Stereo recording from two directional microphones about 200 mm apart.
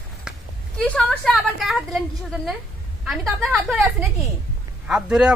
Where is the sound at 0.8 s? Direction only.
5° left (ahead or behind).